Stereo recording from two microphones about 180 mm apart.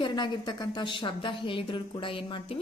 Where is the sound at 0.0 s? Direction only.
25° left (ahead or behind).